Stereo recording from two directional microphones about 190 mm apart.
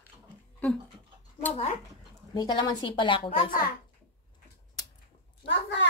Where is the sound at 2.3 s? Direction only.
25° left (ahead or behind).